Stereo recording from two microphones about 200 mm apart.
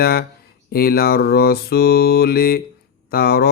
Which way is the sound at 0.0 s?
50° left (ahead or behind).